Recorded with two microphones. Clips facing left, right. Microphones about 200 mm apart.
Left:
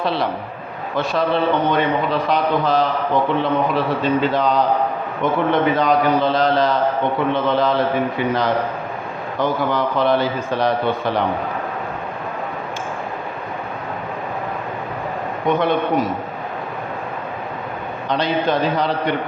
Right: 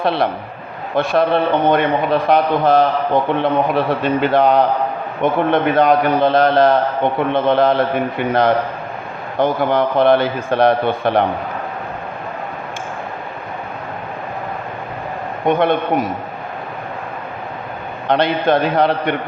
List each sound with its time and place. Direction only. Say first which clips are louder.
0.0 s a man's voice: right 3 dB; 60° right (ahead or behind)
15.4 s a man's voice: right 3 dB; 55° right (ahead or behind)
18.1 s a man's voice: right 4 dB; 60° right (ahead or behind)